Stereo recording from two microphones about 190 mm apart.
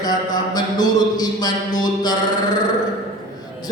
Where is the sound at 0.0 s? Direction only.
20° left (ahead or behind).